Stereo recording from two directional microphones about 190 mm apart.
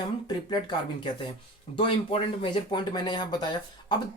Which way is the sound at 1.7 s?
25° left (ahead or behind).